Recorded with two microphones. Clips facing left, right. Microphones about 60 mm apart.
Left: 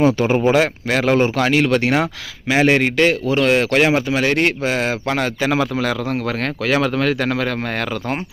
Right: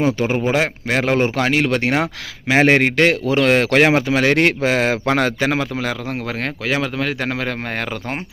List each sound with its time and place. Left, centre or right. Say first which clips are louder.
0.0 s speech: left 3 dB; centre
0.5 s speech: left 2 dB; right
3.1 s speech: even; right
3.5 s speech: right 2 dB; right
4.0 s speech: right 2 dB; right
5.4 s speech: left 1 dB; right; by 7.2 s centre
7.2 s speech: left 3 dB; right